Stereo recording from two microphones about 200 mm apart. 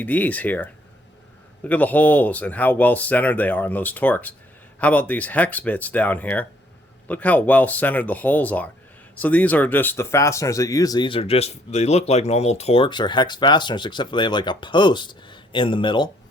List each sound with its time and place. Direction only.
0.0 s speech: 10° left (ahead or behind); by 16.0 s 25° left (ahead or behind)